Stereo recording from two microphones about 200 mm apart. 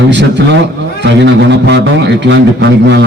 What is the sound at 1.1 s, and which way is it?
A man's voice, 60° right (ahead or behind).